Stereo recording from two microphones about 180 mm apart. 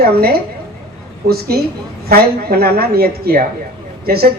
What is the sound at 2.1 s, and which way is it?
A woman's voice, 60° right (ahead or behind).